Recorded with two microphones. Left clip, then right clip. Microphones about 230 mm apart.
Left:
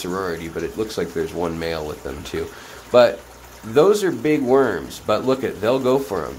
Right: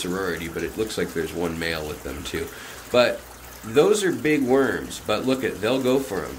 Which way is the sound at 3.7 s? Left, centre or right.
Centre.